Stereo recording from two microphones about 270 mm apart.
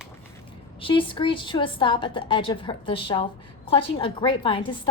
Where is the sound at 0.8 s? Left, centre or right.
Centre.